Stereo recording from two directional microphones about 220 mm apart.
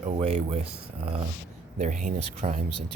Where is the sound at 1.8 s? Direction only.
35° right (ahead or behind).